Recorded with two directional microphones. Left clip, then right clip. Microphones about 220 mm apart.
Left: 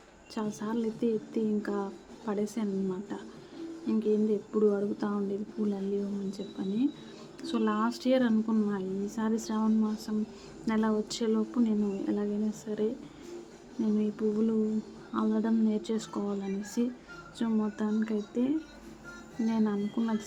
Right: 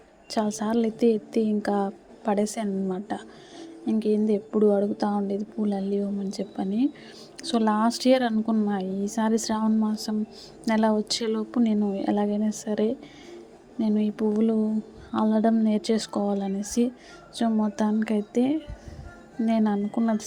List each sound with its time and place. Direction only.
0.3 s a woman's voice: 25° right (ahead or behind)